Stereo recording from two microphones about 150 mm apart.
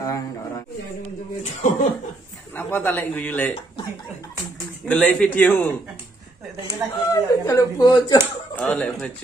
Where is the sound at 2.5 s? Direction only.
15° left (ahead or behind).